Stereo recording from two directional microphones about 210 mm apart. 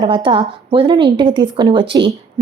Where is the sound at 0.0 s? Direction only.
25° right (ahead or behind).